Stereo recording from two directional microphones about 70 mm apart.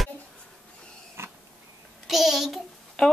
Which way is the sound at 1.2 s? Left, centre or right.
Right.